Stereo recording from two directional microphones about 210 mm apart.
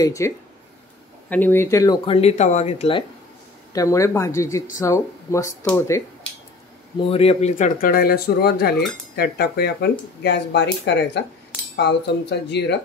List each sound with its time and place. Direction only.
0.0 s speech: 15° left (ahead or behind)
1.3 s speech: 10° left (ahead or behind); by 3.1 s 25° left (ahead or behind)
3.7 s speech: 15° left (ahead or behind)
7.1 s speech: 30° left (ahead or behind); by 12.7 s 55° left (ahead or behind)